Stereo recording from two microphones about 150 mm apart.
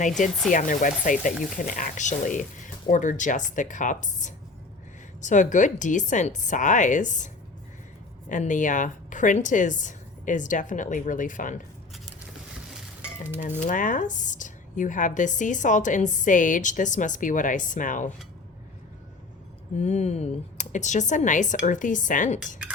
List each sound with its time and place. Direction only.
0.5 s a woman's voice: 60° left (ahead or behind)
8.3 s a woman's voice: 55° left (ahead or behind)
13.7 s a woman's voice: 60° left (ahead or behind)
19.7 s speech: 50° left (ahead or behind)